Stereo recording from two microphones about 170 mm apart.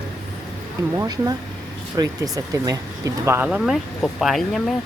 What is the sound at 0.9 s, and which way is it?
Speech, 20° right (ahead or behind).